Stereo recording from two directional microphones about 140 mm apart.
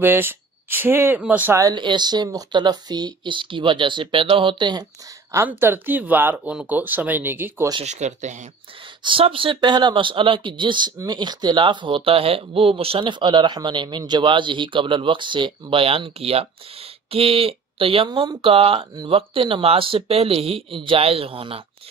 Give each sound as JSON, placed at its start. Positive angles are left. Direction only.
{"t": 0.0, "sound": "speech", "side_deg": -15}
{"t": 1.6, "sound": "speech", "side_deg": -30}
{"t": 5.3, "sound": "speech", "side_deg": -15}
{"t": 7.8, "sound": "speech", "side_deg": -55}
{"t": 9.0, "sound": "speech", "side_deg": -40}